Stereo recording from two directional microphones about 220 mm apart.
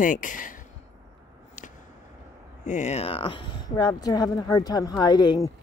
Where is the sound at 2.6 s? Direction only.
30° left (ahead or behind).